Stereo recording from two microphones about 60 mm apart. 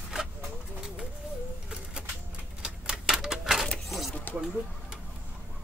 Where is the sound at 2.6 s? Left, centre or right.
Centre.